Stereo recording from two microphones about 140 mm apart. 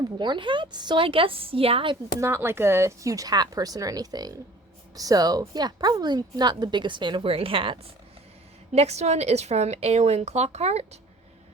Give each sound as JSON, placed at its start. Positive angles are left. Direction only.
{"t": 0.2, "sound": "speech", "side_deg": -35}
{"t": 2.1, "sound": "a woman's voice", "side_deg": -20}